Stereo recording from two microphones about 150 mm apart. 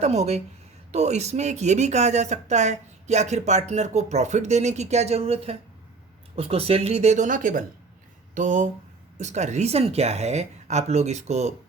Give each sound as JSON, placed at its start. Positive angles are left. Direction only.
{"t": 0.0, "sound": "speech", "side_deg": -45}